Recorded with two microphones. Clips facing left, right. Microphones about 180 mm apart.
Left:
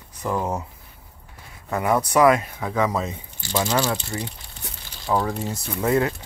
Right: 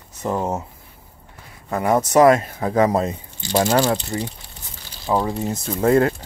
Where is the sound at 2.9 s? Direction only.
55° right (ahead or behind).